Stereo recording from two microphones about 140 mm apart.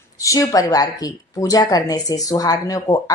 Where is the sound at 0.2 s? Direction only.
25° left (ahead or behind).